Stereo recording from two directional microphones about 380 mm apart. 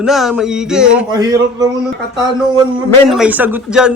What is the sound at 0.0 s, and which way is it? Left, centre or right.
Speech, centre.